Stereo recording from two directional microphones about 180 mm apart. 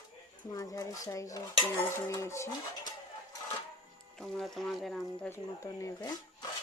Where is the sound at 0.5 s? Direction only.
20° left (ahead or behind).